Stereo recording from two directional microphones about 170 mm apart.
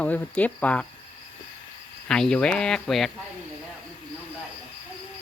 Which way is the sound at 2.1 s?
5° left (ahead or behind).